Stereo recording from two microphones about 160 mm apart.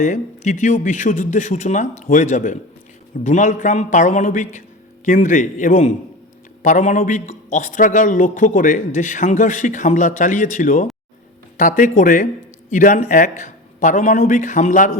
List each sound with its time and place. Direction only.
0.0 s a man's voice: 55° left (ahead or behind)